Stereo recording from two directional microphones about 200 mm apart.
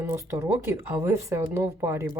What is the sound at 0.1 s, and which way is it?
Speech, 15° right (ahead or behind).